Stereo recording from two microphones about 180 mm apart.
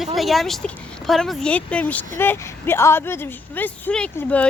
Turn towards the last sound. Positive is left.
turn(degrees=5)  # may be behind; listen again after turning